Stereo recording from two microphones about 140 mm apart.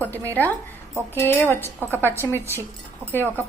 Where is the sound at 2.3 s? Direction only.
15° right (ahead or behind).